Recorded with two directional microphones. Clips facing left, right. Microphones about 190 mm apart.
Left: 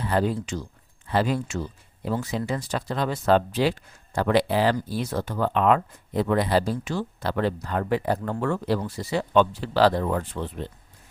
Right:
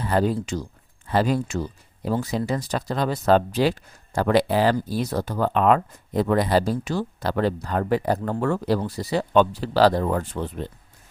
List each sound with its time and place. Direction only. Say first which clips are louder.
0.0 s speech: right 2 dB; 40° right (ahead or behind)